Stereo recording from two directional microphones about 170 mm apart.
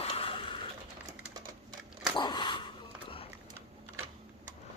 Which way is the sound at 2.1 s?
25° left (ahead or behind).